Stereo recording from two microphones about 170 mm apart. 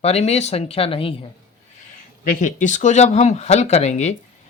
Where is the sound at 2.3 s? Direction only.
45° left (ahead or behind).